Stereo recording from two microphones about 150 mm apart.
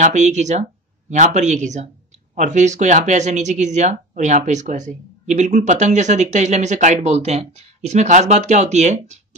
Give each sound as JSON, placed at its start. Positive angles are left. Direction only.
{"t": 0.0, "sound": "speech", "side_deg": -50}